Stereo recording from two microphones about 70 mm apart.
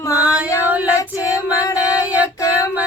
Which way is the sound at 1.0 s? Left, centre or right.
Left.